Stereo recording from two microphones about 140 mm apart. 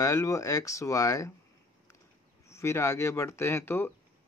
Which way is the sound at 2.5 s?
20° left (ahead or behind).